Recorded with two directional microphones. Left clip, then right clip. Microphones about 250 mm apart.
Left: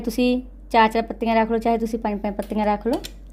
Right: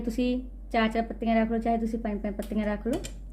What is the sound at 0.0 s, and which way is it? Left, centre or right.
Speech, left.